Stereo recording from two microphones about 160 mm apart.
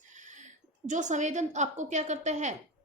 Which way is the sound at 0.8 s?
50° right (ahead or behind).